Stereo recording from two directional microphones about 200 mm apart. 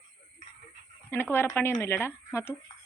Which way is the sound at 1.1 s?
10° left (ahead or behind).